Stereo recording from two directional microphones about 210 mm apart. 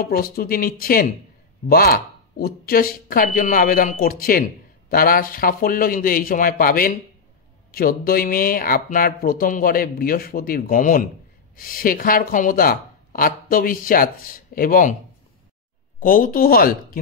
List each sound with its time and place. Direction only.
0.0 s speech: 45° left (ahead or behind)
16.0 s speech: 40° left (ahead or behind)